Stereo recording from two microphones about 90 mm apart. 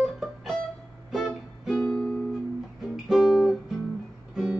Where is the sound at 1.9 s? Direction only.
10° left (ahead or behind).